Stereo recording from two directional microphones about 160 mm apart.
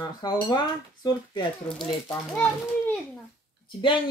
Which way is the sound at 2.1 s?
10° left (ahead or behind).